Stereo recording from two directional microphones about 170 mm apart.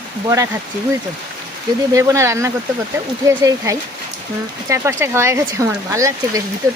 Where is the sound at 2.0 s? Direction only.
15° right (ahead or behind).